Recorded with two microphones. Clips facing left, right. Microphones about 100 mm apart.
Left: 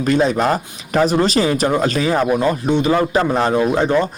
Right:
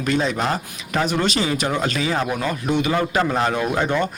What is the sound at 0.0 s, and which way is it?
Speech, 40° left (ahead or behind).